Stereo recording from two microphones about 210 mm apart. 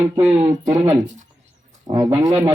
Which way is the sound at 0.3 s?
20° right (ahead or behind).